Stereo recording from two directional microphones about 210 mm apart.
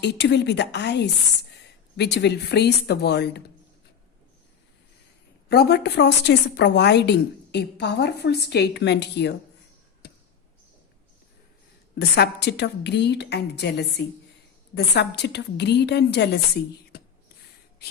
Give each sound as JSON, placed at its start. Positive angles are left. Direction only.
{"t": 0.0, "sound": "a woman's voice", "side_deg": 55}
{"t": 5.5, "sound": "a woman's voice", "side_deg": 50}
{"t": 10.0, "sound": "a sound", "side_deg": 55}
{"t": 11.9, "sound": "a woman's voice", "side_deg": 50}